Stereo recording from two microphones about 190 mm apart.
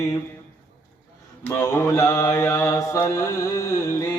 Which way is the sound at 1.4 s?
10° left (ahead or behind).